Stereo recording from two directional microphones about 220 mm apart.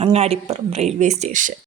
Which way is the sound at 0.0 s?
25° right (ahead or behind).